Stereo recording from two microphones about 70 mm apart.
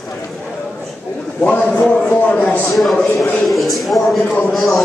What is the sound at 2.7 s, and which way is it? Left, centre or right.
Speech, centre.